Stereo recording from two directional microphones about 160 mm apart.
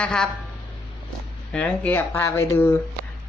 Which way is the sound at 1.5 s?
10° left (ahead or behind).